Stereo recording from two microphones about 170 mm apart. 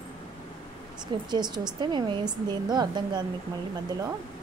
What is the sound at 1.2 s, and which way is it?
A woman's voice, 25° right (ahead or behind).